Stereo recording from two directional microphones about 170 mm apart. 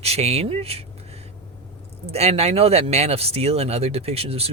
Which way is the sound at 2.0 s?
40° right (ahead or behind).